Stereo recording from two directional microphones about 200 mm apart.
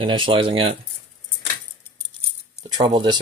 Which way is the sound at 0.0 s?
25° right (ahead or behind).